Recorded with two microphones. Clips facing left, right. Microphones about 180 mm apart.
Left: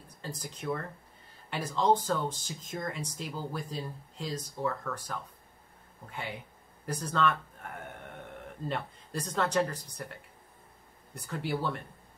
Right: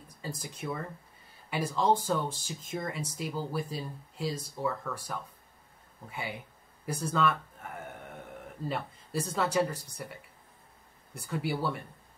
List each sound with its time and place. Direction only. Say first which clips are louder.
0.2 s speech: right 1 dB; 10° right (ahead or behind)
11.1 s speech: right 1 dB; 5° right (ahead or behind)